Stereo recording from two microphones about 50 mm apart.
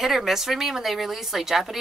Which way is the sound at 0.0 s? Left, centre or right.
Centre.